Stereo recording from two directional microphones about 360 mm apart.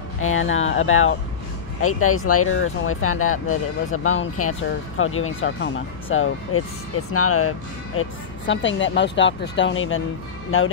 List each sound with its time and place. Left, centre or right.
0.2 s speech: left